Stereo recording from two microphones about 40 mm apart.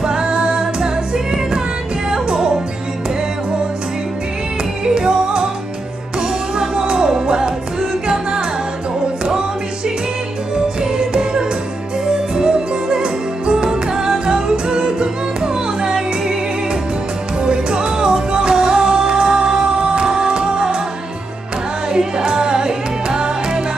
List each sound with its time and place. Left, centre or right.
0.0 s music: centre
4.8 s music: centre
10.5 s music: centre
17.4 s music: centre
21.8 s music: right